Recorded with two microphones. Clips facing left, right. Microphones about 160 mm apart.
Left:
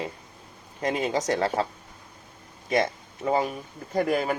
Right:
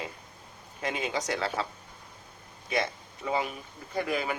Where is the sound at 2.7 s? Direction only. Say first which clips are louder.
Left 6 dB; 45° left (ahead or behind).